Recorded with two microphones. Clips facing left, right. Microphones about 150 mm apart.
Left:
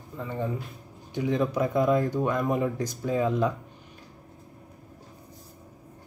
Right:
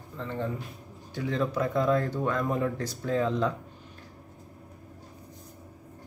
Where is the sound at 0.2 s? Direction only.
15° left (ahead or behind).